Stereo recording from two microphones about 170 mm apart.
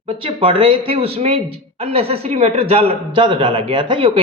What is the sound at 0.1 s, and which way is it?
A man's voice, 30° right (ahead or behind).